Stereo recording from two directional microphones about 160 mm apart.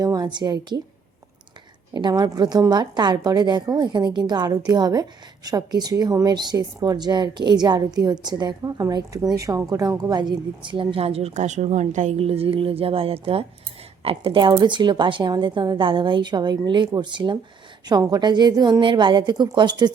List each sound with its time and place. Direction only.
0.0 s a woman's voice: 25° right (ahead or behind)
1.9 s a woman's voice: 25° right (ahead or behind)